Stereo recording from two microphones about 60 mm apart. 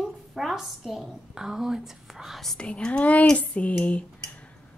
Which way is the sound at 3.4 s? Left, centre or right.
Left.